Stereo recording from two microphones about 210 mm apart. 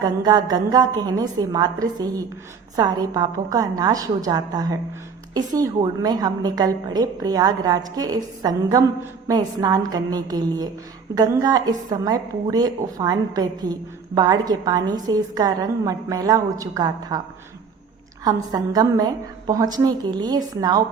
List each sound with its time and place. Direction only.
0.0 s a woman's voice: 20° right (ahead or behind)
18.3 s a woman's voice: 20° right (ahead or behind)